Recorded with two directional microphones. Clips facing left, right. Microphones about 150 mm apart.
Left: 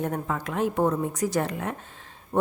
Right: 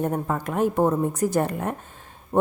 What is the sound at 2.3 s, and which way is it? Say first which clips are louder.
Speech: right 4 dB; 30° right (ahead or behind).